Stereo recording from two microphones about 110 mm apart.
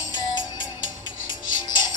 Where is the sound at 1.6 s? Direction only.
40° left (ahead or behind).